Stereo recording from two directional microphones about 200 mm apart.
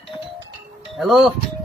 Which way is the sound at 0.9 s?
Centre (ahead or behind).